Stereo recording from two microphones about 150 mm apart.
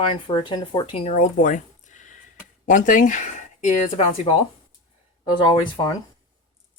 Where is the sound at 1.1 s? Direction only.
60° left (ahead or behind).